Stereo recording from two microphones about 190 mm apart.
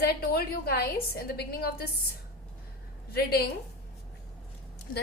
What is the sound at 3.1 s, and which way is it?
Speech, 55° left (ahead or behind).